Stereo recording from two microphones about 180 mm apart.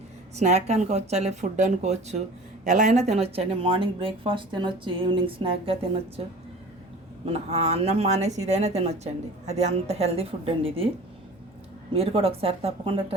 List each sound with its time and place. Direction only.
0.3 s speech: 40° right (ahead or behind)
7.3 s speech: 35° right (ahead or behind)
11.9 s speech: 30° right (ahead or behind)